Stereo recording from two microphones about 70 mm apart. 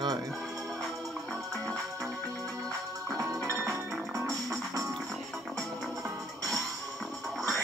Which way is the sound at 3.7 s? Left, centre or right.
Right.